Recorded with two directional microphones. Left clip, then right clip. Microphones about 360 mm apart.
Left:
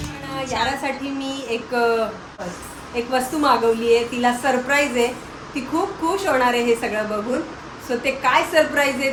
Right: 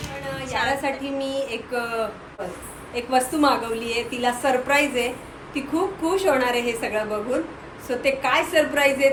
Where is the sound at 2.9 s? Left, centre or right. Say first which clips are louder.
Even; centre.